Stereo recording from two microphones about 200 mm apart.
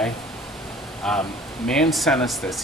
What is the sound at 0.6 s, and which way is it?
Speech, centre (ahead or behind).